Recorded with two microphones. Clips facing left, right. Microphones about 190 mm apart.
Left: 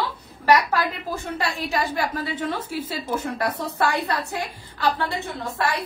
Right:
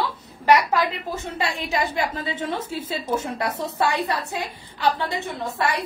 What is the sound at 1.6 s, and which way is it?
A woman's voice, 25° right (ahead or behind).